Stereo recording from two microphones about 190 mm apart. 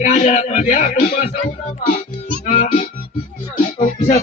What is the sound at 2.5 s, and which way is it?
Music, 45° left (ahead or behind).